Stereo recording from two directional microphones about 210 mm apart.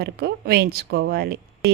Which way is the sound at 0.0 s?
50° right (ahead or behind).